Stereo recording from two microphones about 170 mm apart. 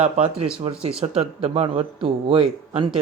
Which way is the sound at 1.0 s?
35° right (ahead or behind).